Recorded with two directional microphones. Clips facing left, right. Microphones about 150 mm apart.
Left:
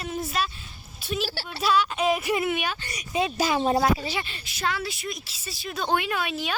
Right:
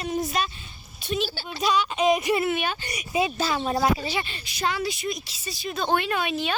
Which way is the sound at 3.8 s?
5° left (ahead or behind).